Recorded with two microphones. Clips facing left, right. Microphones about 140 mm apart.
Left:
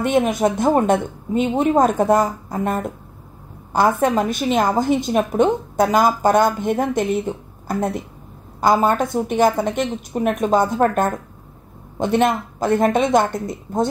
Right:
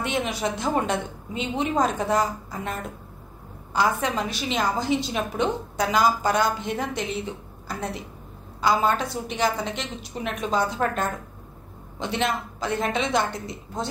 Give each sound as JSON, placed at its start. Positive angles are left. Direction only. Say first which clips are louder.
{"t": 0.0, "sound": "a woman's voice", "louder": "left 9 dB", "side_deg": 50}